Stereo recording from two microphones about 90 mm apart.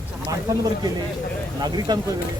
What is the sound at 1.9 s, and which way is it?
Speech, 50° right (ahead or behind).